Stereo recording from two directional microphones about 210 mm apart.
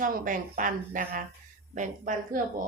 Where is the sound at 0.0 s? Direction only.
40° right (ahead or behind).